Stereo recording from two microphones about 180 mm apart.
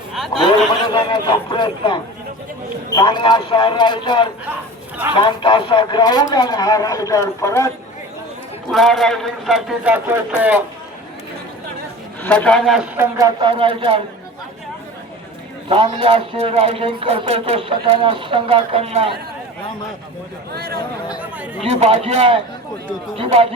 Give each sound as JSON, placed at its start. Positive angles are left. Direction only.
{"t": 0.9, "sound": "a man's voice", "side_deg": 25}
{"t": 8.7, "sound": "a man's voice", "side_deg": 0}
{"t": 12.2, "sound": "a man's voice", "side_deg": 10}
{"t": 13.0, "sound": "speech", "side_deg": -20}
{"t": 15.7, "sound": "a man's voice", "side_deg": -30}
{"t": 20.5, "sound": "speech", "side_deg": -60}
{"t": 21.6, "sound": "a man's voice", "side_deg": -35}